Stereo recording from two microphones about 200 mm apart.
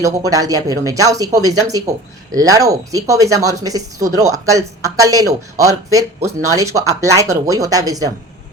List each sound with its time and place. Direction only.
0.0 s speech: 15° right (ahead or behind)